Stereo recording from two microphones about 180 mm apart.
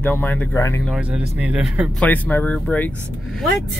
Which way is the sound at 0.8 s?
5° right (ahead or behind).